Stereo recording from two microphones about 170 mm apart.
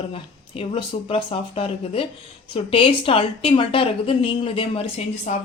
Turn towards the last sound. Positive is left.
turn(degrees=45)  # may be behind; listen again after turning